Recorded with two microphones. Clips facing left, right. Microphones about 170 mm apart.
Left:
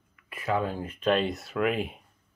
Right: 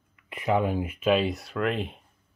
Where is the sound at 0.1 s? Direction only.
20° right (ahead or behind).